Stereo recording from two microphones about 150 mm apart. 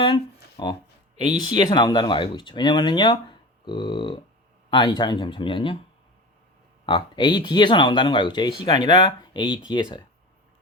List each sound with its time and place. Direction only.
0.0 s a sound: 35° left (ahead or behind)
1.4 s speech: 30° left (ahead or behind)
6.8 s speech: 30° left (ahead or behind)